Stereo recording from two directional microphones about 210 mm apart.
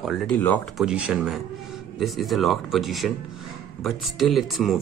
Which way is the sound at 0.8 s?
5° right (ahead or behind).